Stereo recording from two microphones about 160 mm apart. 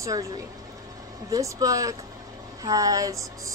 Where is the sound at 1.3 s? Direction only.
20° right (ahead or behind).